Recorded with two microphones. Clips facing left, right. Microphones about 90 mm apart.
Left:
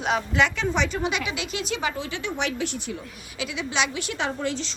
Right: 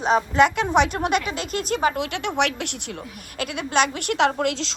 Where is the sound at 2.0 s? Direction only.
70° right (ahead or behind).